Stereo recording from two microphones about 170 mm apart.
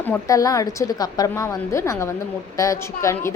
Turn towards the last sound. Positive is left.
turn(degrees=15)  # may be behind; listen again after turning